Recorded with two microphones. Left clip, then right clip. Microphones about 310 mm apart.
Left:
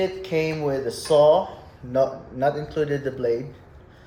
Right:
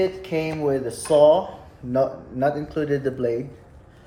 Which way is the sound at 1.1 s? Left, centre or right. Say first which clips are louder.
Right 1 dB; right.